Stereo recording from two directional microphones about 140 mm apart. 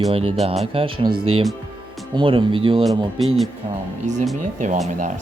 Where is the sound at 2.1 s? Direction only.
40° right (ahead or behind).